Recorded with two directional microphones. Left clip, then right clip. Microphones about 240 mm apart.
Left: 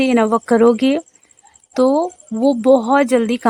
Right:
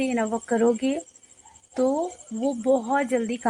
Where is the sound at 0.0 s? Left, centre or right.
Left.